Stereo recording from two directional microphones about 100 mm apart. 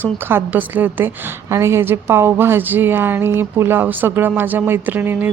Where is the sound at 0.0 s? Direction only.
20° right (ahead or behind).